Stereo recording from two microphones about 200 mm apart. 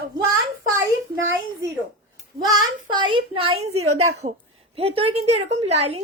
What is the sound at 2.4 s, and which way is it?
A woman's voice, 20° right (ahead or behind).